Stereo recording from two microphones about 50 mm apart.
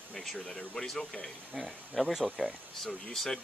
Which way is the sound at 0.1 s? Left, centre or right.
Centre.